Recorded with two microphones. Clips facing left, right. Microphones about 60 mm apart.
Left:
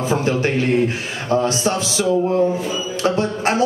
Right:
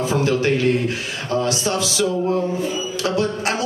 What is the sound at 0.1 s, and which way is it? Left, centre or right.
Speech, left.